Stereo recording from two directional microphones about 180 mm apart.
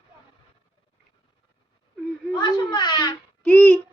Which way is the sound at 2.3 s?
25° left (ahead or behind).